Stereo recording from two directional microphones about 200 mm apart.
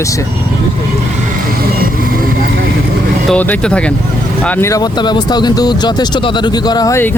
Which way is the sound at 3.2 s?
5° left (ahead or behind).